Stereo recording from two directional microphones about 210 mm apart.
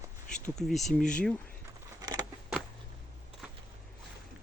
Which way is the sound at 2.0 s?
20° right (ahead or behind).